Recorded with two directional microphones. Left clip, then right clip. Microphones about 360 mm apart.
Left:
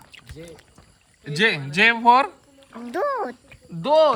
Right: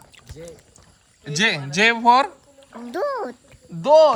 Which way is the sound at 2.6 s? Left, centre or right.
Right.